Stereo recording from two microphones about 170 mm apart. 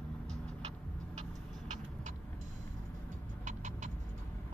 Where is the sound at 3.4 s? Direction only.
45° right (ahead or behind).